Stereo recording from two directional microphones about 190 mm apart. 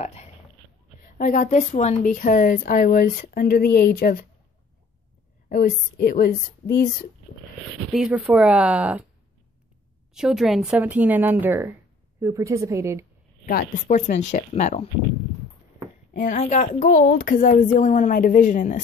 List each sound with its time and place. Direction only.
0.0 s speech: 35° left (ahead or behind)
5.5 s a woman's voice: 55° left (ahead or behind)
7.9 s speech: 5° right (ahead or behind)
10.1 s a woman's voice: 5° right (ahead or behind)
13.5 s speech: 45° left (ahead or behind)
16.1 s speech: 40° left (ahead or behind)